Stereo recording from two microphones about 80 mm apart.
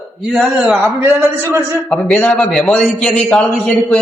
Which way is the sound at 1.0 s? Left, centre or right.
Right.